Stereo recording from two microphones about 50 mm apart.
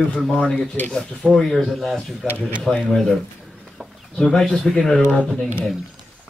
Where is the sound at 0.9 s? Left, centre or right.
Centre.